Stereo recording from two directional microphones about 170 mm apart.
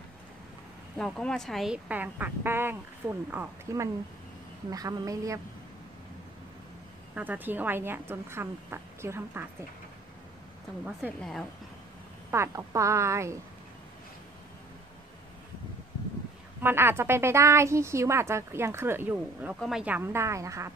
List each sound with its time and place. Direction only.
0.9 s a woman's voice: 5° left (ahead or behind); by 5.4 s 20° right (ahead or behind)
7.2 s a woman's voice: 10° right (ahead or behind)
11.1 s a woman's voice: centre (ahead or behind)
12.3 s a woman's voice: 15° right (ahead or behind)
16.6 s a woman's voice: 15° right (ahead or behind)